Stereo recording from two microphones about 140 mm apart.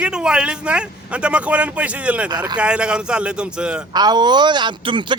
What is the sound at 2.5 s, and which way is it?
A man's voice, 10° right (ahead or behind).